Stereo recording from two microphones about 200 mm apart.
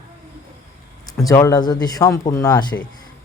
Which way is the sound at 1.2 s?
15° left (ahead or behind).